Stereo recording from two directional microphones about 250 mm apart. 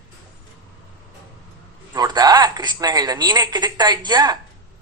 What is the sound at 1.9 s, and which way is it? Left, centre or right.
A woman's voice, centre.